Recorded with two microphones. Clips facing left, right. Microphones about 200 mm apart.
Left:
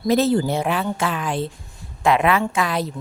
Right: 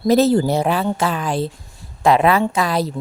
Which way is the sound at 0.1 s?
40° right (ahead or behind).